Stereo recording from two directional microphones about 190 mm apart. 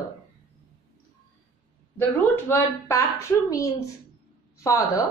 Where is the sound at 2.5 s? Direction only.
10° left (ahead or behind).